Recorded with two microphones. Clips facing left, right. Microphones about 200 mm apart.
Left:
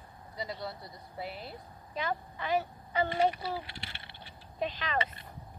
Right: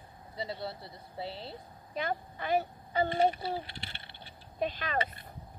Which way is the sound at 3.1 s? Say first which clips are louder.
Right 1 dB; 30° right (ahead or behind).